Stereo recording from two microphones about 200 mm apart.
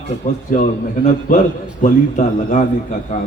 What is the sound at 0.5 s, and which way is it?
A man's voice, 40° left (ahead or behind).